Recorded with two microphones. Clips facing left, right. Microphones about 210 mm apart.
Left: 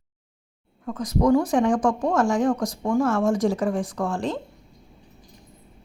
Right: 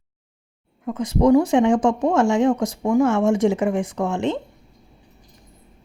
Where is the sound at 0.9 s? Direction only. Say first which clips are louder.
Right 4 dB; 25° right (ahead or behind).